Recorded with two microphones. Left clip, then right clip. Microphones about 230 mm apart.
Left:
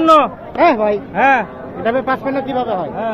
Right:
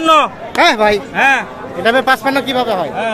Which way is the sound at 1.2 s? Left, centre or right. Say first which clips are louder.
Even; left.